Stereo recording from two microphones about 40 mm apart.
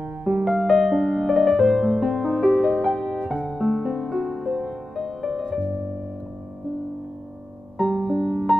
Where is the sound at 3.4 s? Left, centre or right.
Centre.